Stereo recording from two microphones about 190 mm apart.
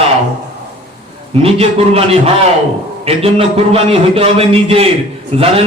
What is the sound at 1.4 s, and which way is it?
A man's voice, 30° right (ahead or behind).